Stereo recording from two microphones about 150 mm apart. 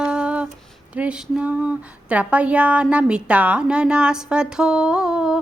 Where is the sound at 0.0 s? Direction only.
5° right (ahead or behind).